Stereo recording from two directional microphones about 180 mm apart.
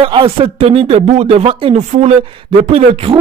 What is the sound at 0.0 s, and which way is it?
A man's voice, 30° right (ahead or behind).